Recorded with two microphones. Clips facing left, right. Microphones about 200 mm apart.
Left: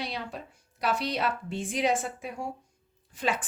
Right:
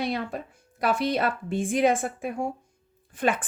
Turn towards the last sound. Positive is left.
turn(degrees=-55)  # may be behind; listen again after turning